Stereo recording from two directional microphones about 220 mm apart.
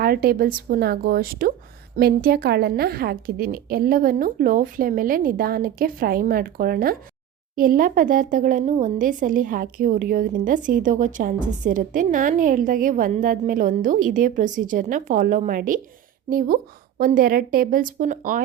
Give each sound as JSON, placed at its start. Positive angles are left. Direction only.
{"t": 0.0, "sound": "a woman's voice", "side_deg": -45}